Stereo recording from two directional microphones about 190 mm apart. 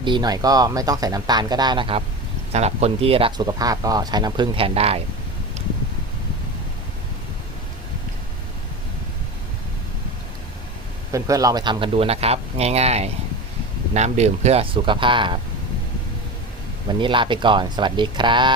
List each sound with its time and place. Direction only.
0.0 s speech: 25° right (ahead or behind)
11.1 s speech: 20° right (ahead or behind)
17.0 s speech: 25° right (ahead or behind)